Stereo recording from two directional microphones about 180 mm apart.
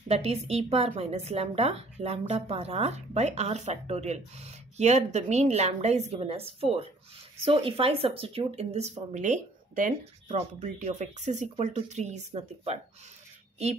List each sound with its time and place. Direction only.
0.1 s a woman's voice: 35° right (ahead or behind)